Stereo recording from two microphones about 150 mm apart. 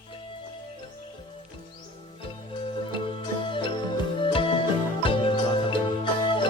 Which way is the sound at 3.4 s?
35° left (ahead or behind).